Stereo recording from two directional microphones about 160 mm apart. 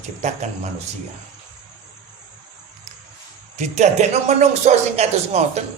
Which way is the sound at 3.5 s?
45° right (ahead or behind).